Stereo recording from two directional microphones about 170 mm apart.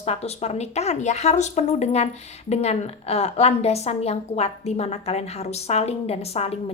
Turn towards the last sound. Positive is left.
turn(degrees=35)  # may be behind; listen again after turning